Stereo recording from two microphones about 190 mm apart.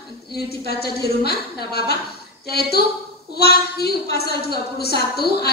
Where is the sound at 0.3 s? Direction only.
55° left (ahead or behind).